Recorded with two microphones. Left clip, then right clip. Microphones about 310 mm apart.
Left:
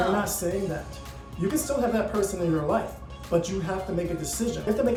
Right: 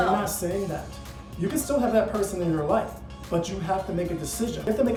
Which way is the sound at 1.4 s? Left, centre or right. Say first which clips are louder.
Right 1 dB; centre.